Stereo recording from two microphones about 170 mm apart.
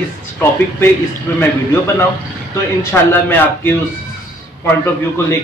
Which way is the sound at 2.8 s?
15° left (ahead or behind).